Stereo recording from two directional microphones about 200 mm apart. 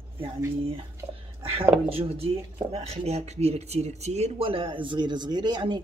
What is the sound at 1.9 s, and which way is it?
Speech, 30° right (ahead or behind).